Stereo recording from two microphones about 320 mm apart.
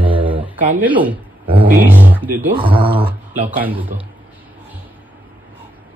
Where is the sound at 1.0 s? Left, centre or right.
Centre.